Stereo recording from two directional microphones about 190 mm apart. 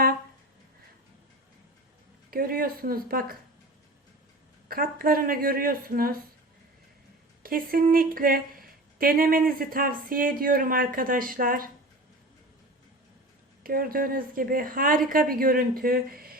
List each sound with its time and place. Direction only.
2.3 s a woman's voice: 50° right (ahead or behind)
4.7 s a woman's voice: 50° right (ahead or behind)
7.4 s a woman's voice: 50° right (ahead or behind)
13.7 s a woman's voice: 50° right (ahead or behind)